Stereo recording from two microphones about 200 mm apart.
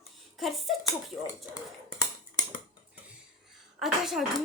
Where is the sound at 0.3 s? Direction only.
Centre (ahead or behind).